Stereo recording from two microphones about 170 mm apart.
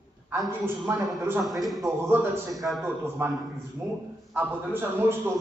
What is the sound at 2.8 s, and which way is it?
Speech, 15° right (ahead or behind).